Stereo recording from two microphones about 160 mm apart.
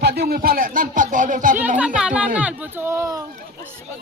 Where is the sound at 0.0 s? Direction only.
85° right; by 1.5 s 55° right (ahead or behind).